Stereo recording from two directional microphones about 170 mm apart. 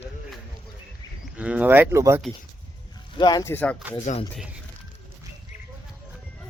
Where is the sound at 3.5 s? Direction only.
10° left (ahead or behind).